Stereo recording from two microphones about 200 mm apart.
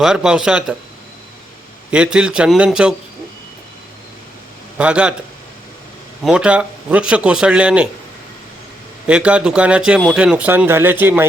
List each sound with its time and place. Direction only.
0.0 s speech: 5° right (ahead or behind)
1.9 s speech: 5° right (ahead or behind)
4.8 s a man's voice: 5° right (ahead or behind)
6.2 s speech: 5° right (ahead or behind)
9.0 s speech: 5° right (ahead or behind)